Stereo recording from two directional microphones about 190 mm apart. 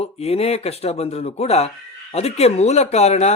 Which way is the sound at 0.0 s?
35° left (ahead or behind).